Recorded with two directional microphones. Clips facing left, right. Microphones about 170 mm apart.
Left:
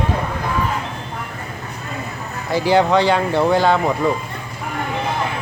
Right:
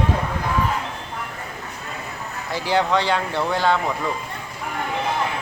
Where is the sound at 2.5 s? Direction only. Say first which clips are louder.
Left 6 dB; 10° left (ahead or behind).